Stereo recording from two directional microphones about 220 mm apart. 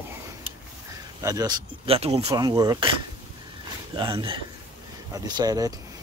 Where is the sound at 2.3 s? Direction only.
15° right (ahead or behind).